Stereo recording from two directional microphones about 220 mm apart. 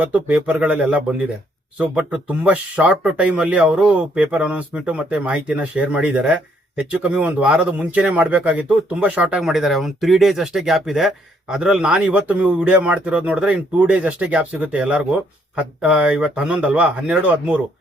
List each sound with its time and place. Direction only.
0.0 s speech: 5° right (ahead or behind)